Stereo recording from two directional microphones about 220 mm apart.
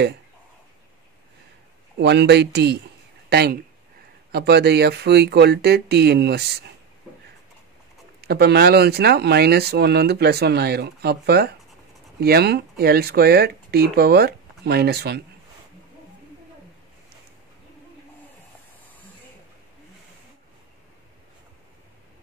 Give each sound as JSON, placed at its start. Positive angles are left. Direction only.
{"t": 2.0, "sound": "speech", "side_deg": -50}
{"t": 8.2, "sound": "speech", "side_deg": -45}